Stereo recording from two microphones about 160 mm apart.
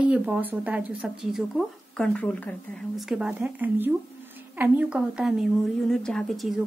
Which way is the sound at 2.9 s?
Centre (ahead or behind).